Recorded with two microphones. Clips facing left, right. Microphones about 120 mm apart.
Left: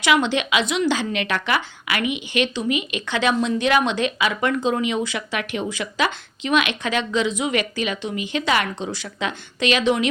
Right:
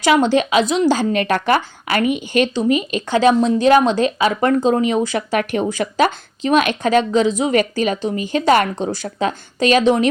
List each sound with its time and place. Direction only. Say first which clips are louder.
0.0 s a woman's voice: right 5 dB; 40° right (ahead or behind)